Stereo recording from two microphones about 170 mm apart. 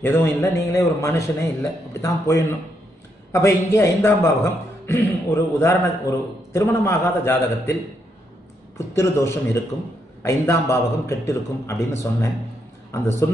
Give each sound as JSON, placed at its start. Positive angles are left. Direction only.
{"t": 0.0, "sound": "a man's voice", "side_deg": 15}
{"t": 8.7, "sound": "a man's voice", "side_deg": 15}